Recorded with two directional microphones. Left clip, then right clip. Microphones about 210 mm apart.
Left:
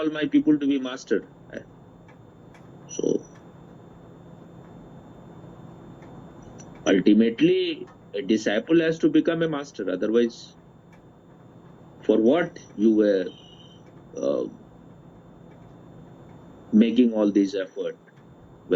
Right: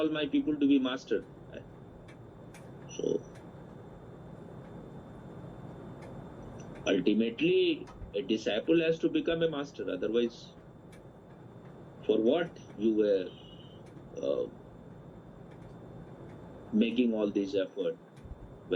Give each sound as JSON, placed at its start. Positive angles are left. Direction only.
{"t": 0.0, "sound": "a man's voice", "side_deg": 45}
{"t": 2.9, "sound": "speech", "side_deg": 45}
{"t": 6.6, "sound": "a man's voice", "side_deg": 45}
{"t": 12.0, "sound": "a man's voice", "side_deg": 45}
{"t": 16.7, "sound": "a man's voice", "side_deg": 45}